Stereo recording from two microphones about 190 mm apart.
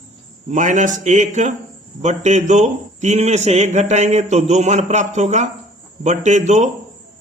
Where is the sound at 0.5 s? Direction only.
40° right (ahead or behind).